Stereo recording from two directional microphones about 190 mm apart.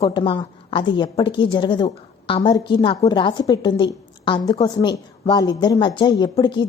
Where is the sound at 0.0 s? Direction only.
25° left (ahead or behind).